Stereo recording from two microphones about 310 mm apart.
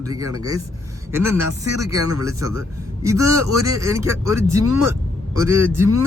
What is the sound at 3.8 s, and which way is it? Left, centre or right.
Speech, centre.